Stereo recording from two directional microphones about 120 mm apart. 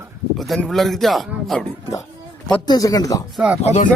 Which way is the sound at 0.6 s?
Centre (ahead or behind).